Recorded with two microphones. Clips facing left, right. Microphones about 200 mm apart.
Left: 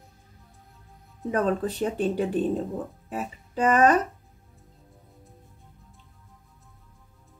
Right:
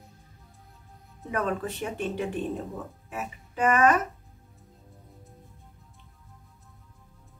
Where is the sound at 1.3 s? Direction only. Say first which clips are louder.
Left 4 dB; 35° left (ahead or behind).